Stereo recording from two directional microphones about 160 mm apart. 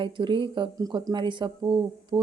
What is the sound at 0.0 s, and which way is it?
A woman's voice, 30° right (ahead or behind).